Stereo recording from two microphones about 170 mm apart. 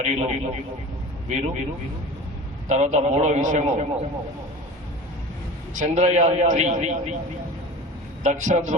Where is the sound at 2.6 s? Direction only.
45° right (ahead or behind).